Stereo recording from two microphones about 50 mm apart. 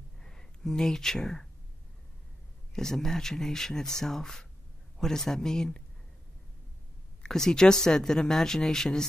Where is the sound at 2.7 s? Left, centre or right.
Centre.